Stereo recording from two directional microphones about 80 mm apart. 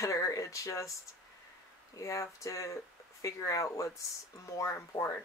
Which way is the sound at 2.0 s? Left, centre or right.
Left.